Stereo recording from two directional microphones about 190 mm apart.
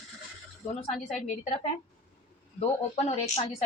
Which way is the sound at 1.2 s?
40° left (ahead or behind).